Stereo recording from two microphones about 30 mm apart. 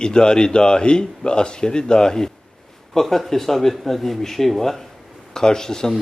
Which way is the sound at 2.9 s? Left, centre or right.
Centre.